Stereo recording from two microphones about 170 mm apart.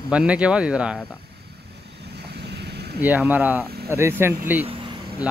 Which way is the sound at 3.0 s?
10° right (ahead or behind).